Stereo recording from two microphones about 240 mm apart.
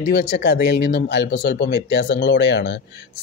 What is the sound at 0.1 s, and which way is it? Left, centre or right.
Speech, left.